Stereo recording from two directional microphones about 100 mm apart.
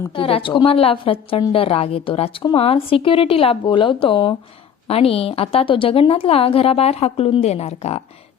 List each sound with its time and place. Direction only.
0.1 s a woman's voice: 65° left (ahead or behind)
4.9 s a woman's voice: 80° left